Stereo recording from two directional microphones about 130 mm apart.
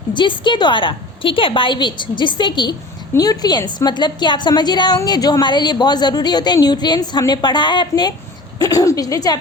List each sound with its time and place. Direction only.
0.1 s a woman's voice: 40° left (ahead or behind)